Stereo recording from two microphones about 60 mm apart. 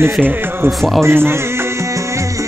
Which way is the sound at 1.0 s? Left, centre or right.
Right.